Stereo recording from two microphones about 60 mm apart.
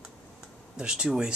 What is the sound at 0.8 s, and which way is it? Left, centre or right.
Speech, centre.